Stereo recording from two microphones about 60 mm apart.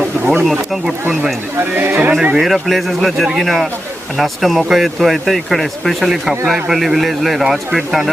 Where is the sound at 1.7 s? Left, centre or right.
Right.